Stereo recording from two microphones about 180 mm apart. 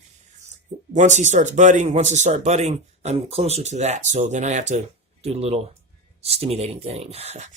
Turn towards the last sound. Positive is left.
turn(degrees=-40)  # may be behind; listen again after turning